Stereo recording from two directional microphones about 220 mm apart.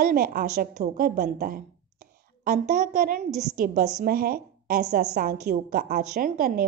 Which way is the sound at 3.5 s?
40° right (ahead or behind).